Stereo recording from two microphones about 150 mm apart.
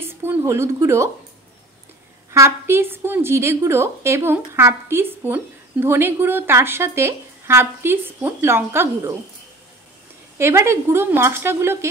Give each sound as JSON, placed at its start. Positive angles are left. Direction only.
{"t": 0.0, "sound": "speech", "side_deg": -15}
{"t": 2.3, "sound": "a woman's voice", "side_deg": -20}
{"t": 10.3, "sound": "a woman's voice", "side_deg": -15}